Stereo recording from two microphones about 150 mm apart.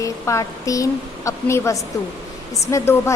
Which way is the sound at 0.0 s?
20° left (ahead or behind).